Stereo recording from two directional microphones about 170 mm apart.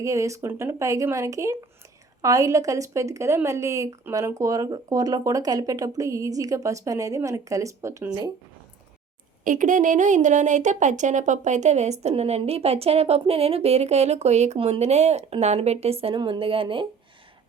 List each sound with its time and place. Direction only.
0.0 s a woman's voice: 20° right (ahead or behind)
9.4 s speech: 50° right (ahead or behind); by 16.8 s 30° right (ahead or behind)